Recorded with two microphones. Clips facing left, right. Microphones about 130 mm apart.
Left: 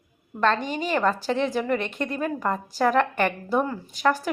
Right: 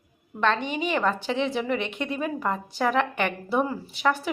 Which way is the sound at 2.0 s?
5° right (ahead or behind).